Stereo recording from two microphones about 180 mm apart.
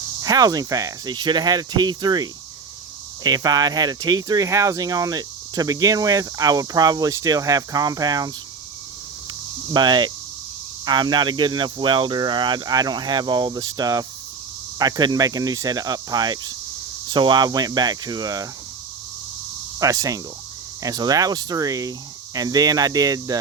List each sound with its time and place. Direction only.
0.2 s speech: 20° right (ahead or behind)
9.7 s speech: 25° right (ahead or behind)
19.8 s speech: 20° right (ahead or behind)